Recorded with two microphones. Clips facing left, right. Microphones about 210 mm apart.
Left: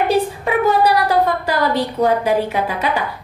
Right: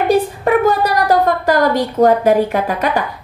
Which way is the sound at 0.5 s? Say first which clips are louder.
Right 2 dB; 50° right (ahead or behind).